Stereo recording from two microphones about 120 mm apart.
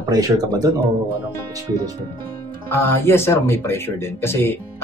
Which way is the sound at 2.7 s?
20° left (ahead or behind).